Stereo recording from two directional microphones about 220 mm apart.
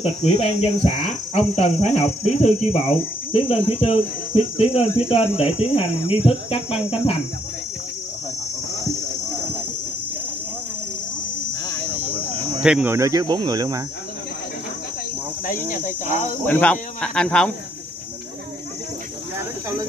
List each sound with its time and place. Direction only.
0.0 s speech: 30° left (ahead or behind)
12.6 s speech: 5° right (ahead or behind)
15.4 s speech: 40° left (ahead or behind)
16.4 s speech: 10° left (ahead or behind)